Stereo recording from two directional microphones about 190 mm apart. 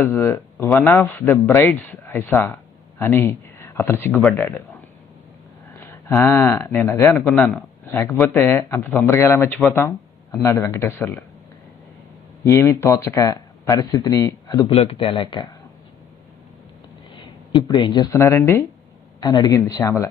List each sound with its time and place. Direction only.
0.0 s speech: 10° left (ahead or behind)
5.8 s a sound: 15° left (ahead or behind)
6.2 s a man's voice: 10° left (ahead or behind)
12.4 s speech: 15° left (ahead or behind)
14.7 s speech: 30° left (ahead or behind)
17.6 s speech: 25° left (ahead or behind)